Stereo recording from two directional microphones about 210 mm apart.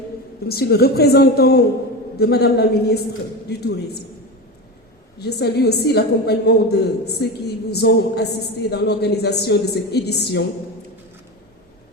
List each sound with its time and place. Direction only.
0.4 s a woman's voice: 50° left (ahead or behind)
5.2 s a woman's voice: 50° left (ahead or behind)